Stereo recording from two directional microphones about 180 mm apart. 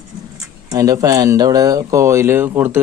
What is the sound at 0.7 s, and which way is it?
Speech, 20° right (ahead or behind).